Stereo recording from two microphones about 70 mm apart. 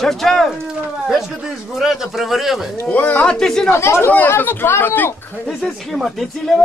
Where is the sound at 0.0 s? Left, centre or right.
Centre.